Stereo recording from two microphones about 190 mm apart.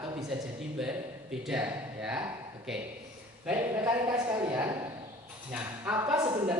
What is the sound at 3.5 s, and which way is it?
Speech, 10° right (ahead or behind).